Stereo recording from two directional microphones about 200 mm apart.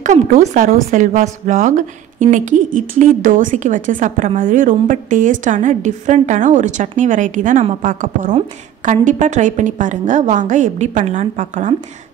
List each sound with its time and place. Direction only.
0.0 s speech: 40° right (ahead or behind)